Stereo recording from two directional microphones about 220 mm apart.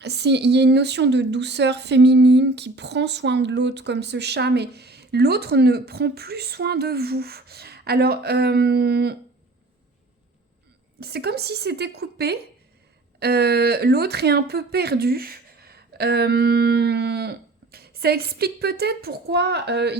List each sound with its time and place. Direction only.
0.0 s a woman's voice: 50° right (ahead or behind)
11.0 s a woman's voice: 45° right (ahead or behind)